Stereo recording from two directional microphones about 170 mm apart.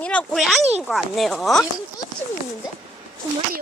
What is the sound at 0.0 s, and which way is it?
A child's voice, 5° left (ahead or behind).